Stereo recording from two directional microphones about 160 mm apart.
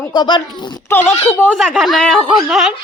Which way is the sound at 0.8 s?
15° left (ahead or behind).